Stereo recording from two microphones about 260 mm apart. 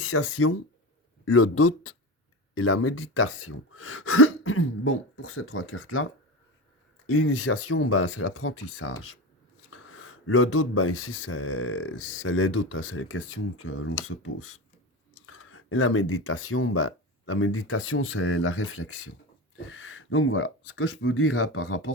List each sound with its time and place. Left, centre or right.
0.0 s speech: left
7.1 s speech: left